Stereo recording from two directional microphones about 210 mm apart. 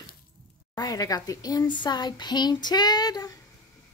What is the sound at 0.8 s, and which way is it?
Speech, 15° left (ahead or behind).